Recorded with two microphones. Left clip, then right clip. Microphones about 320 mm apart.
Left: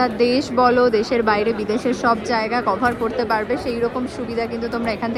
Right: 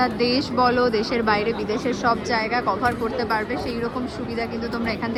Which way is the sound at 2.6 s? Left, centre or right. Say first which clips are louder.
Left 3 dB; left.